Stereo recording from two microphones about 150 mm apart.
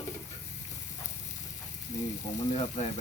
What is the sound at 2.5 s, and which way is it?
Speech, 45° left (ahead or behind).